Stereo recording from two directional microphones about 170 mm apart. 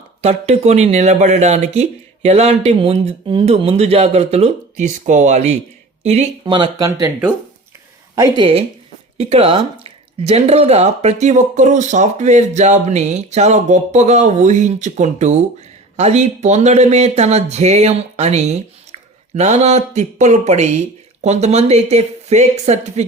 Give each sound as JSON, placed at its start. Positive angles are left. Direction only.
{"t": 0.2, "sound": "speech", "side_deg": -40}
{"t": 6.4, "sound": "speech", "side_deg": -25}
{"t": 8.1, "sound": "speech", "side_deg": -20}
{"t": 9.1, "sound": "speech", "side_deg": -35}